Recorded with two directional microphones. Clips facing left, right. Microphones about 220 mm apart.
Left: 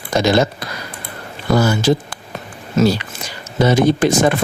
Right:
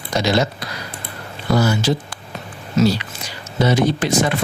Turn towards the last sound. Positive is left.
turn(degrees=50)  # may be behind; listen again after turning